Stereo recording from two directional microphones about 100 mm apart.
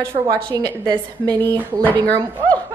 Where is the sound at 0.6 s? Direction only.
45° right (ahead or behind).